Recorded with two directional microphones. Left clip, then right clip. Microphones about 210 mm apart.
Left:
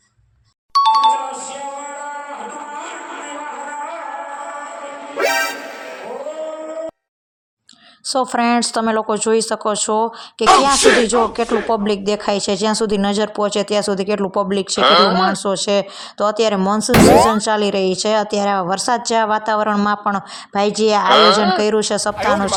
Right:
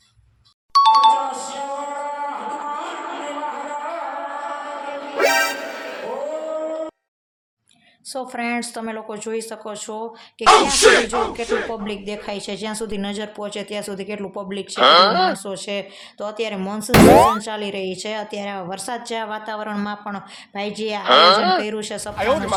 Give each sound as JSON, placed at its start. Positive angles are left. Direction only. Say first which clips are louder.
{"t": 0.7, "sound": "music", "louder": "even", "side_deg": 0}
{"t": 5.1, "sound": "music", "louder": "even", "side_deg": 0}
{"t": 8.0, "sound": "speech", "louder": "left 10 dB", "side_deg": 30}
{"t": 14.8, "sound": "speech", "louder": "even", "side_deg": 0}
{"t": 15.4, "sound": "speech", "louder": "left 10 dB", "side_deg": 30}
{"t": 16.9, "sound": "speech", "louder": "even", "side_deg": 0}
{"t": 17.4, "sound": "speech", "louder": "left 10 dB", "side_deg": 30}
{"t": 21.0, "sound": "speech", "louder": "even", "side_deg": 0}
{"t": 21.6, "sound": "speech", "louder": "left 10 dB", "side_deg": 30}
{"t": 22.1, "sound": "speech", "louder": "even", "side_deg": 0}